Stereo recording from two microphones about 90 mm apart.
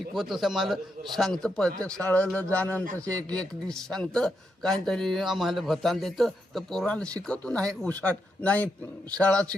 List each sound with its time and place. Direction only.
0.1 s a man's voice: centre (ahead or behind)